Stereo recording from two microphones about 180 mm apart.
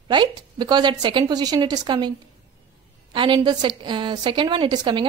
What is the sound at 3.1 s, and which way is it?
Speech, 25° right (ahead or behind).